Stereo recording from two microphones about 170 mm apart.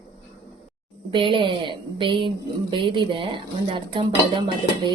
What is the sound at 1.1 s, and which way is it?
Speech, 30° right (ahead or behind).